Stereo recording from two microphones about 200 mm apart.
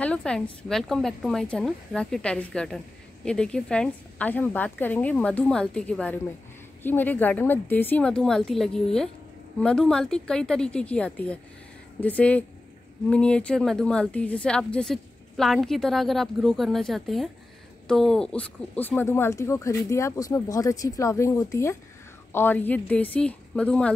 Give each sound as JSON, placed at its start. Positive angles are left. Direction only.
{"t": 0.0, "sound": "a woman's voice", "side_deg": 5}